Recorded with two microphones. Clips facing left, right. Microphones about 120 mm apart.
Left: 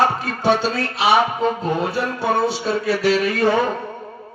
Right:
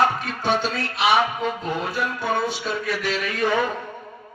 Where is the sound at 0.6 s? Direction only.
35° left (ahead or behind).